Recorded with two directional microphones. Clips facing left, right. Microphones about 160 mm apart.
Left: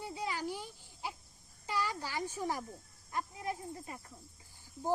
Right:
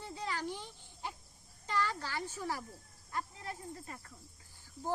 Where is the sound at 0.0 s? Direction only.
10° left (ahead or behind).